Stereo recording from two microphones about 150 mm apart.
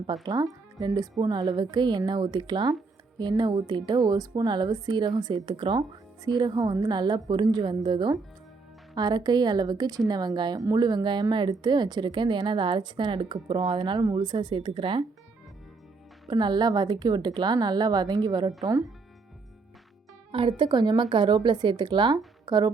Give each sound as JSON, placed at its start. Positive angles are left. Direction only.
{"t": 0.3, "sound": "a woman's voice", "side_deg": -25}
{"t": 16.3, "sound": "a woman's voice", "side_deg": -30}
{"t": 20.3, "sound": "speech", "side_deg": -35}